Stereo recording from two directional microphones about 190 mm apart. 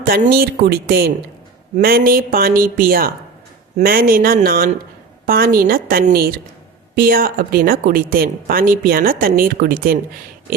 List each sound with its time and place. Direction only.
0.0 s speech: 50° right (ahead or behind)